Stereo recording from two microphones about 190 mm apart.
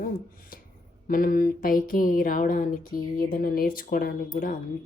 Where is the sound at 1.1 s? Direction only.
45° left (ahead or behind).